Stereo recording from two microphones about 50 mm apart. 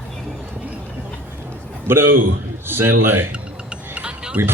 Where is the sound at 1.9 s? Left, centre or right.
Right.